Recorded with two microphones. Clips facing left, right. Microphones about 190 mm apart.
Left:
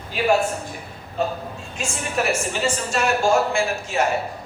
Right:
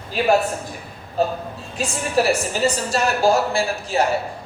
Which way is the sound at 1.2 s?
35° right (ahead or behind).